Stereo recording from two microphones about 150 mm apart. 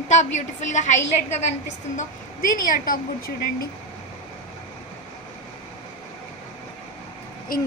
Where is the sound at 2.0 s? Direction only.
65° left (ahead or behind).